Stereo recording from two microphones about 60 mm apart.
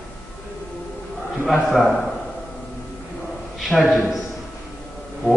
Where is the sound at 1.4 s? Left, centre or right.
Centre.